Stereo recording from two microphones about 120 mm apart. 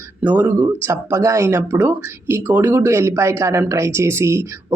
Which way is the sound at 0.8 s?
20° right (ahead or behind).